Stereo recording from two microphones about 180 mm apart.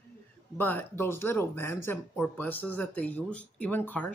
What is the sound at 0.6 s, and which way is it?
Speech, 10° left (ahead or behind).